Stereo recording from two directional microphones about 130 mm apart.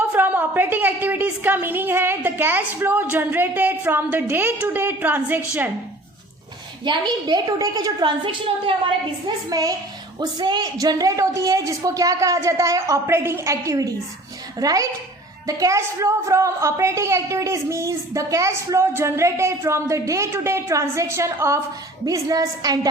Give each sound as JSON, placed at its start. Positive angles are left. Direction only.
{"t": 0.1, "sound": "a woman's voice", "side_deg": -15}
{"t": 6.8, "sound": "a woman's voice", "side_deg": -35}